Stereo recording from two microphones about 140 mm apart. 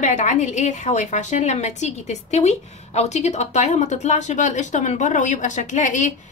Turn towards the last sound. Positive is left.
turn(degrees=60)  # may be behind; listen again after turning